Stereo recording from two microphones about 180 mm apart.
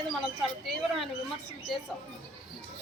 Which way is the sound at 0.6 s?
Centre (ahead or behind).